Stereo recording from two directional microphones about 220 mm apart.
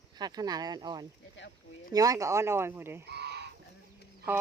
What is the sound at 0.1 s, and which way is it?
Speech, 20° right (ahead or behind).